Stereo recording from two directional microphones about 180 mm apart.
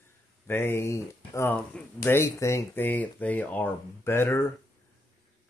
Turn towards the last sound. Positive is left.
turn(degrees=15)  # may be behind; listen again after turning